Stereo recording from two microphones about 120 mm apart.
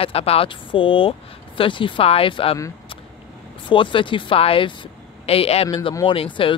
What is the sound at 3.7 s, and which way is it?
Speech, 45° left (ahead or behind).